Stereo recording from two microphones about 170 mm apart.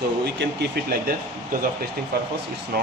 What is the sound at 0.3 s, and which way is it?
Speech, 70° right (ahead or behind).